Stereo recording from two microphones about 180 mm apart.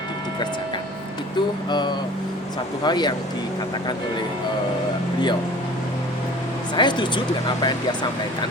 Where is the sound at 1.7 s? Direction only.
25° left (ahead or behind).